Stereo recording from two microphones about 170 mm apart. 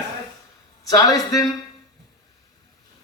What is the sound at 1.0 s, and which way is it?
Speech, 20° left (ahead or behind).